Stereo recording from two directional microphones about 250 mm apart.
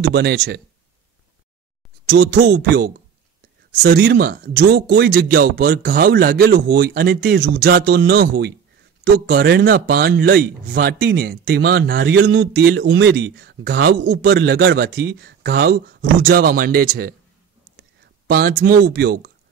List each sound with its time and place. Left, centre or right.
0.0 s speech: right
2.0 s speech: right
18.2 s speech: right